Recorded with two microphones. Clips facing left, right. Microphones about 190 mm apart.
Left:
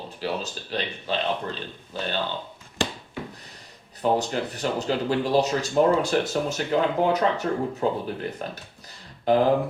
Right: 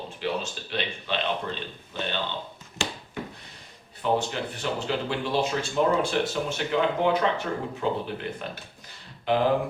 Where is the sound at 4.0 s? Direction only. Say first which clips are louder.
Left 3 dB; 40° left (ahead or behind).